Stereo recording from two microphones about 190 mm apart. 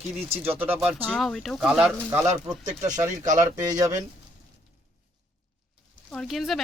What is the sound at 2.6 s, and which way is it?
Speech, 40° right (ahead or behind).